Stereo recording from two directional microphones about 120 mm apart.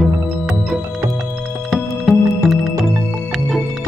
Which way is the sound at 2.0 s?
Centre (ahead or behind).